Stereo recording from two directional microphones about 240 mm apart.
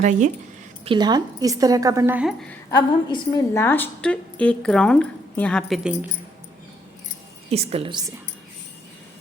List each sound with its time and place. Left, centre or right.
0.0 s speech: right
0.9 s a woman's voice: centre
2.6 s a woman's voice: centre
7.5 s a woman's voice: right